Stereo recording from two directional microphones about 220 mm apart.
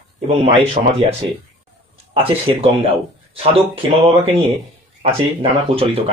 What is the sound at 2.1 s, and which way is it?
Speech, 25° right (ahead or behind).